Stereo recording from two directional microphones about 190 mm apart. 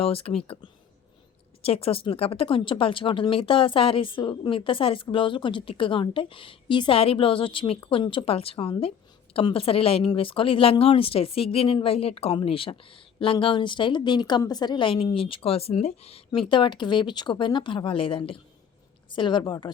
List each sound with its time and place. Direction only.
0.0 s speech: 30° left (ahead or behind)